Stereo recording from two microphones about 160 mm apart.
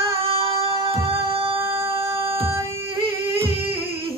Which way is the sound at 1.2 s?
35° right (ahead or behind).